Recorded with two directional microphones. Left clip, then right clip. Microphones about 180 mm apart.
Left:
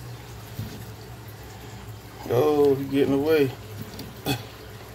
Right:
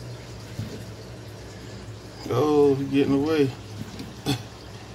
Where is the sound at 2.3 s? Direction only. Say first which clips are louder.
Even; 20° left (ahead or behind).